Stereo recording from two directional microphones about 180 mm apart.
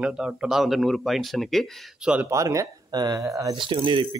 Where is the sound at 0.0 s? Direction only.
5° right (ahead or behind).